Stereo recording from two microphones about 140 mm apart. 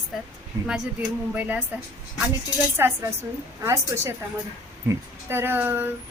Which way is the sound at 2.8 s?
20° right (ahead or behind).